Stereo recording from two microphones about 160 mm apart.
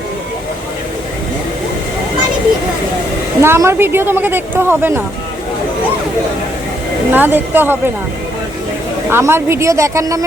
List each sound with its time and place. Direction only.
3.4 s speech: 15° right (ahead or behind)
7.1 s speech: 10° right (ahead or behind)
9.0 s a woman's voice: 15° right (ahead or behind)